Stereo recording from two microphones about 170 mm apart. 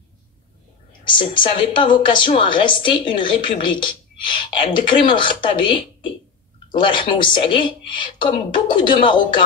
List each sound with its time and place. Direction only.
1.0 s a woman's voice: 30° left (ahead or behind)